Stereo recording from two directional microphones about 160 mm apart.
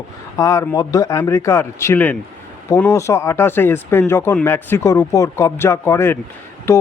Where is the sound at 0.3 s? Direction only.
20° left (ahead or behind).